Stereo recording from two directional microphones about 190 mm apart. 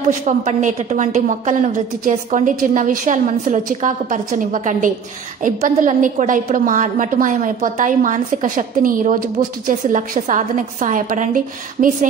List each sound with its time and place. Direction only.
0.2 s a woman's voice: 40° right (ahead or behind)